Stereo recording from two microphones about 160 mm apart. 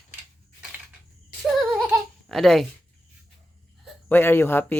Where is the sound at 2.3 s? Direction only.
Centre (ahead or behind).